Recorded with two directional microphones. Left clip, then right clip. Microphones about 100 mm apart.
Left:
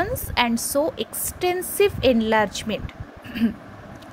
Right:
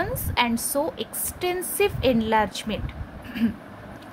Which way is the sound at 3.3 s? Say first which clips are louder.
Left 2 dB; 35° left (ahead or behind).